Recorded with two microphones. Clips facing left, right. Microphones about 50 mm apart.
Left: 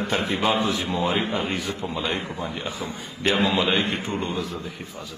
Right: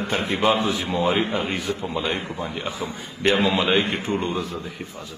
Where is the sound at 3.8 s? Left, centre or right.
Right.